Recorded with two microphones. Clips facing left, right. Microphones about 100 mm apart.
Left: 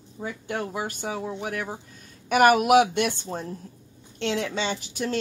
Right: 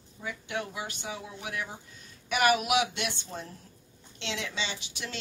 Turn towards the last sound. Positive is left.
turn(degrees=45)  # may be behind; listen again after turning